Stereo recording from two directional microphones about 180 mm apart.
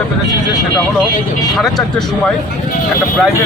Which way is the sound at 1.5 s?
Centre (ahead or behind).